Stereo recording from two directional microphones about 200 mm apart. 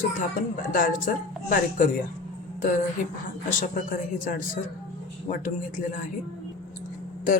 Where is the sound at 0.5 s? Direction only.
45° left (ahead or behind).